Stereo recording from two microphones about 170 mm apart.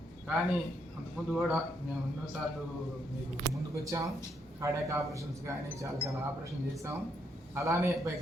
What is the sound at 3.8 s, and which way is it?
Speech, 20° right (ahead or behind).